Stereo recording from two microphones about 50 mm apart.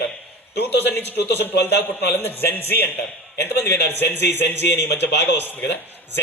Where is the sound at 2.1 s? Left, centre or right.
Left.